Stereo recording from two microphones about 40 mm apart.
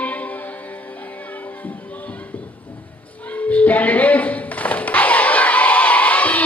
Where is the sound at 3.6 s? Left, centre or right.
Left.